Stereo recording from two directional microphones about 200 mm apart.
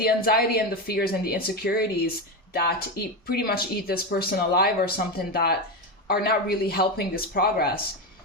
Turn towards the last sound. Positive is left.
turn(degrees=50)  # may be behind; listen again after turning